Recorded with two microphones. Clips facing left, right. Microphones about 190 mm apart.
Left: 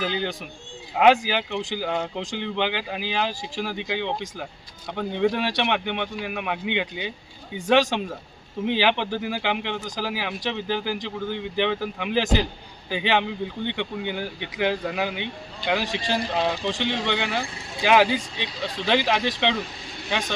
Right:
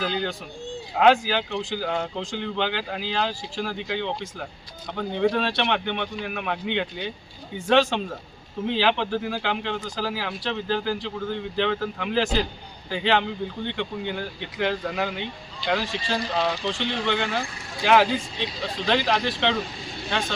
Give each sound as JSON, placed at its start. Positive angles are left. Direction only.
{"t": 0.0, "sound": "speech", "side_deg": 15}
{"t": 14.3, "sound": "speech", "side_deg": 65}
{"t": 14.6, "sound": "speech", "side_deg": 10}